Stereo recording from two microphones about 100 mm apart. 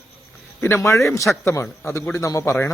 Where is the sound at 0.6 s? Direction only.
25° left (ahead or behind).